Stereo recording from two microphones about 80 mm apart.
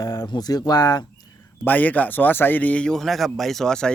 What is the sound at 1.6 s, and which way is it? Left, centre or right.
Speech, left.